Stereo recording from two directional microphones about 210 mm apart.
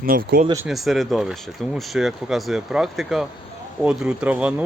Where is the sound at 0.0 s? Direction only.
45° right (ahead or behind).